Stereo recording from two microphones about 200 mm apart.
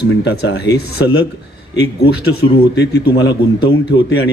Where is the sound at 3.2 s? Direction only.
20° left (ahead or behind).